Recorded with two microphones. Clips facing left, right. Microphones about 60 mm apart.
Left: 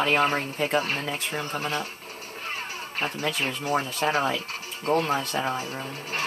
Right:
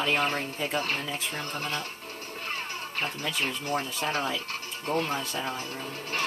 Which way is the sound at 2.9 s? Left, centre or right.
Centre.